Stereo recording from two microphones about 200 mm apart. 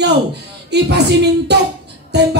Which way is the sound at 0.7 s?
55° right (ahead or behind).